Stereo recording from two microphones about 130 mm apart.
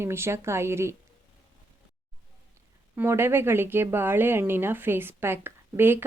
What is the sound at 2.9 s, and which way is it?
Speech, 20° right (ahead or behind).